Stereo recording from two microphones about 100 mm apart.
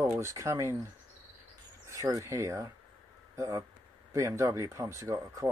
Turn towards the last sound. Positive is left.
turn(degrees=-35)  # may be behind; listen again after turning